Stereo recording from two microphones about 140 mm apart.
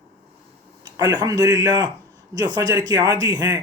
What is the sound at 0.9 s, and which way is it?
Speech, 25° right (ahead or behind).